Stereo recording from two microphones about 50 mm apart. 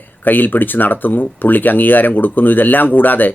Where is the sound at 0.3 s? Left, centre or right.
Left.